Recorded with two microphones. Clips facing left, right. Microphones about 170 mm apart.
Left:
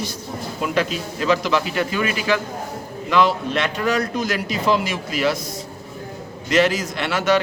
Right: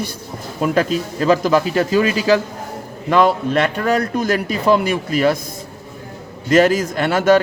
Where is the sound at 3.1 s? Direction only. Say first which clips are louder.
Right 4 dB; 50° right (ahead or behind).